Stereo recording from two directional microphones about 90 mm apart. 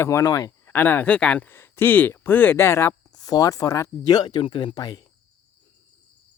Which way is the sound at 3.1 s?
45° left (ahead or behind).